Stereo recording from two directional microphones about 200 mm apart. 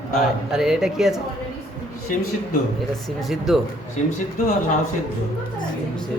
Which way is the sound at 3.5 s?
Centre (ahead or behind).